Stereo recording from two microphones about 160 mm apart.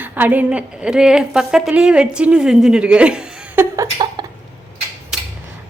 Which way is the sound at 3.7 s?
25° right (ahead or behind).